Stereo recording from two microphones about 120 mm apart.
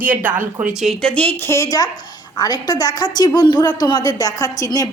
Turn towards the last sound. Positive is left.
turn(degrees=30)  # may be behind; listen again after turning